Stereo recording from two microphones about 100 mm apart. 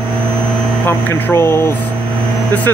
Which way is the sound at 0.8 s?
15° left (ahead or behind).